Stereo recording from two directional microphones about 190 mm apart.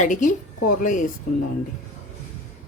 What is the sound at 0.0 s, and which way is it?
A woman's voice, 45° left (ahead or behind).